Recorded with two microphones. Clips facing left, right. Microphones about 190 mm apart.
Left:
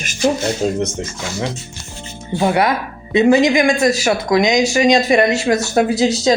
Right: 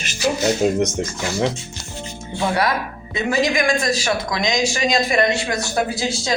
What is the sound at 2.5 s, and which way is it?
Speech, 25° left (ahead or behind).